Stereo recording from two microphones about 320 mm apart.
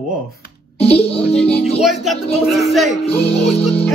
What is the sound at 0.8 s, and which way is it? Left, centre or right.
Music, centre.